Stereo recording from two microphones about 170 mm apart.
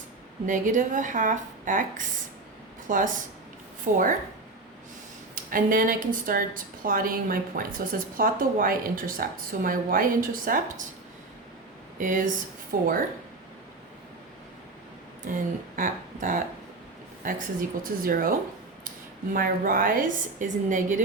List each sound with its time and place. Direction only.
0.4 s a woman's voice: 50° right (ahead or behind)
5.3 s a woman's voice: 55° right (ahead or behind)
11.9 s a woman's voice: 50° right (ahead or behind)
15.2 s a woman's voice: 50° right (ahead or behind)